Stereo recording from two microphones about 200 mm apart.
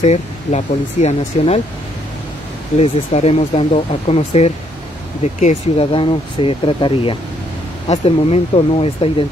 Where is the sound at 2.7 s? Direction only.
30° left (ahead or behind).